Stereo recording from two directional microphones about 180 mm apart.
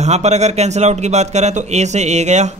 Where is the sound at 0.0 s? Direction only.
40° right (ahead or behind).